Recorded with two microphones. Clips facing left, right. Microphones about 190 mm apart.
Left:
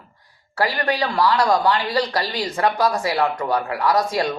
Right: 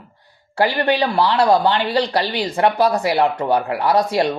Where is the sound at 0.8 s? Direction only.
25° right (ahead or behind).